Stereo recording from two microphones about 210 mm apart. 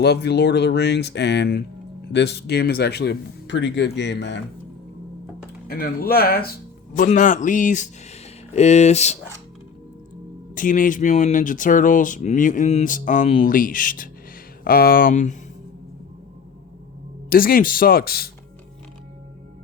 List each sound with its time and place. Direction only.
0.0 s speech: 50° left (ahead or behind)
5.6 s speech: 45° left (ahead or behind)
10.5 s speech: 40° left (ahead or behind)
17.2 s speech: 45° left (ahead or behind)